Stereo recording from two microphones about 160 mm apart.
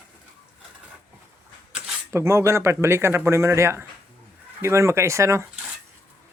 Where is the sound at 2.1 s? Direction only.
15° right (ahead or behind).